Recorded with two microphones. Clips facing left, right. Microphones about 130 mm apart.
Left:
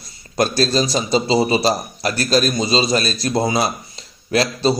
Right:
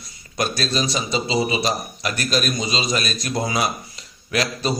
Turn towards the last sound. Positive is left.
turn(degrees=30)  # may be behind; listen again after turning